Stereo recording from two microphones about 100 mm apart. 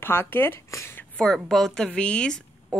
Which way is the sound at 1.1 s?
5° left (ahead or behind).